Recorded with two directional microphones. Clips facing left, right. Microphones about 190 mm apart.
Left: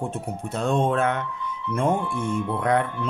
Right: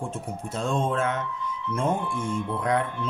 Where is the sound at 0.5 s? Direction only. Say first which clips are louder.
Left 4 dB; 65° left (ahead or behind).